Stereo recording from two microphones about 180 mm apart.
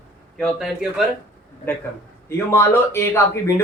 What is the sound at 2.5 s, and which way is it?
A man's voice, 15° left (ahead or behind).